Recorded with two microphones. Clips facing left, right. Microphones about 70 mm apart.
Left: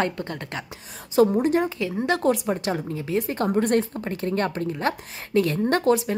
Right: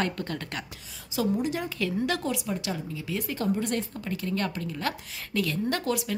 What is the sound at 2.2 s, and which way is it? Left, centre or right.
A woman's voice, left.